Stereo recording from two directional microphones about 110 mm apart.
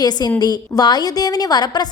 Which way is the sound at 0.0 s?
35° left (ahead or behind).